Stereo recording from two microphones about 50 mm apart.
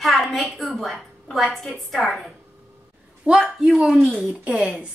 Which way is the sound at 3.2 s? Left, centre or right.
Centre.